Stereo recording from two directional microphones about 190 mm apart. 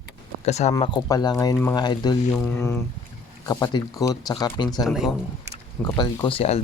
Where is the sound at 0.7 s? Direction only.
25° left (ahead or behind).